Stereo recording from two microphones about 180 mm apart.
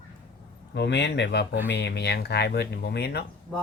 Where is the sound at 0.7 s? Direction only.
75° left (ahead or behind).